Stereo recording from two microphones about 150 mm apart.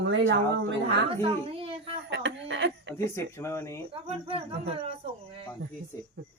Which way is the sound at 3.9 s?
40° right (ahead or behind).